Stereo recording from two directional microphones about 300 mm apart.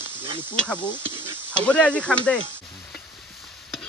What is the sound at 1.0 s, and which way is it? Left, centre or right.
Stir, centre.